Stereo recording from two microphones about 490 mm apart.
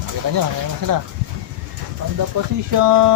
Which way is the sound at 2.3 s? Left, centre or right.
Right.